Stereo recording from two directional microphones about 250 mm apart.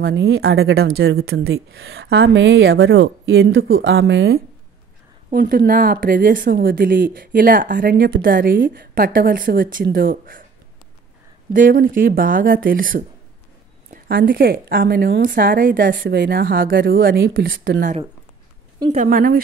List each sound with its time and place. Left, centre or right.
0.0 s a woman's voice: right
11.5 s a woman's voice: right